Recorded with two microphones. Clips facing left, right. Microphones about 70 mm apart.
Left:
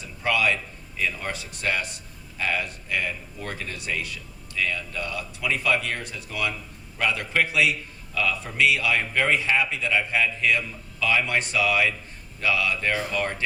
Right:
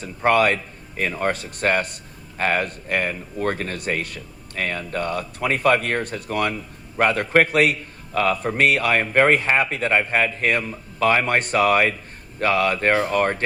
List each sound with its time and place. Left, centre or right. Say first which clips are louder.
0.0 s a man's voice: right 7 dB; right